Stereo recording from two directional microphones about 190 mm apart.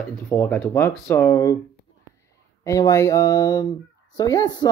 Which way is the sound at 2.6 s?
15° left (ahead or behind).